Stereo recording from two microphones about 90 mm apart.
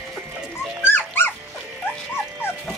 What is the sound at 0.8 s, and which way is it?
Dog, 25° left (ahead or behind).